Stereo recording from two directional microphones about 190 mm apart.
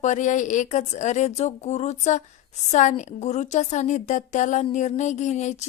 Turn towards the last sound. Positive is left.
turn(degrees=40)  # may be behind; listen again after turning